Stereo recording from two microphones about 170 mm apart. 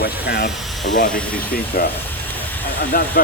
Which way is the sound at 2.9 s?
60° left (ahead or behind).